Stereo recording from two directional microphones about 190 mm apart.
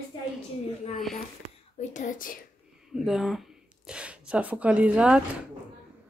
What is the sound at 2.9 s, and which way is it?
Speech, centre (ahead or behind).